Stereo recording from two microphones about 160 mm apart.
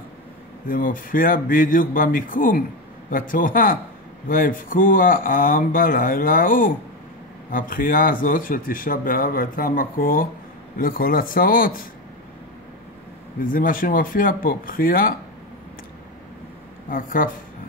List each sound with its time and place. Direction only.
0.7 s speech: 60° left (ahead or behind)
13.4 s speech: 60° left (ahead or behind)
16.9 s speech: 60° left (ahead or behind)